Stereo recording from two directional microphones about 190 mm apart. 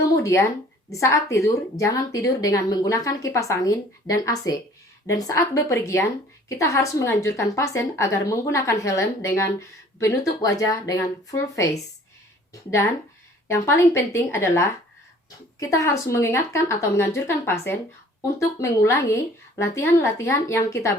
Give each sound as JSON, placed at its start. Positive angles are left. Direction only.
{"t": 0.0, "sound": "a woman's voice", "side_deg": 15}
{"t": 13.5, "sound": "a woman's voice", "side_deg": 15}